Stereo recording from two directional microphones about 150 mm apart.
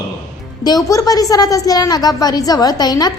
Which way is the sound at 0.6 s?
25° left (ahead or behind).